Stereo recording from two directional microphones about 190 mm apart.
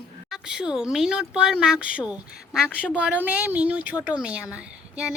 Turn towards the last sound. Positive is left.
turn(degrees=-5)  # may be behind; listen again after turning